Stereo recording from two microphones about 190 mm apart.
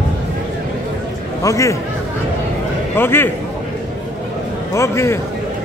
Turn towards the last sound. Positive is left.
turn(degrees=15)  # may be behind; listen again after turning